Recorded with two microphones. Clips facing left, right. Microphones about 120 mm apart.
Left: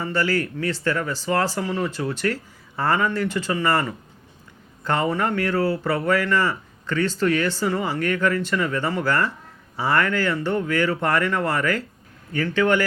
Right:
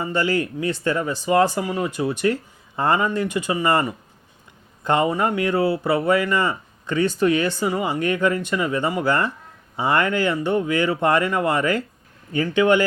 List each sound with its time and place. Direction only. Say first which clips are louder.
0.0 s speech: right 1 dB; 20° right (ahead or behind)